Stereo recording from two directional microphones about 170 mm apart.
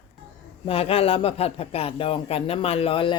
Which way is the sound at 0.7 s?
35° left (ahead or behind).